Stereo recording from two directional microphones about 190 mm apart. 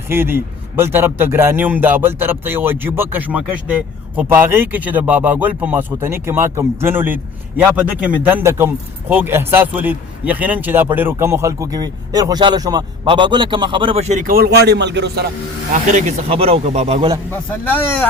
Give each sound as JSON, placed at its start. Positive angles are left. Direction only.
{"t": 0.1, "sound": "a man's voice", "side_deg": -10}
{"t": 14.3, "sound": "a man's voice", "side_deg": -50}
{"t": 15.7, "sound": "speech", "side_deg": -40}
{"t": 17.3, "sound": "speech", "side_deg": 10}